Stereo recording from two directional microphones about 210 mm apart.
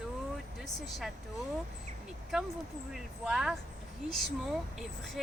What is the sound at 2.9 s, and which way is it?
Speech, centre (ahead or behind).